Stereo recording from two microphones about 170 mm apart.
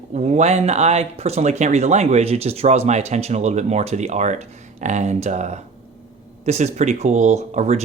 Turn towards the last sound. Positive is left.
turn(degrees=-40)  # may be behind; listen again after turning